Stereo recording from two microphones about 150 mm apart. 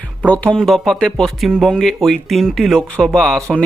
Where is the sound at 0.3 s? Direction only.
10° left (ahead or behind).